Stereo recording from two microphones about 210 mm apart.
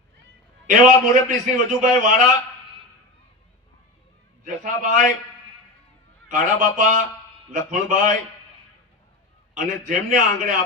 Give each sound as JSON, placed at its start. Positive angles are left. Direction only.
{"t": 0.7, "sound": "a man's voice", "side_deg": -40}
{"t": 4.4, "sound": "a man's voice", "side_deg": -40}
{"t": 6.2, "sound": "a man's voice", "side_deg": -40}
{"t": 9.6, "sound": "a man's voice", "side_deg": -35}